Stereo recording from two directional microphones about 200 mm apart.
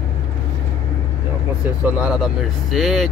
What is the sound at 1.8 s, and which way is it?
Speech, 5° right (ahead or behind).